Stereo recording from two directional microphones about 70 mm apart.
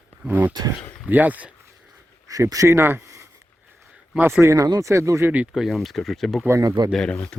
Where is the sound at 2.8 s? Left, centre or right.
Right.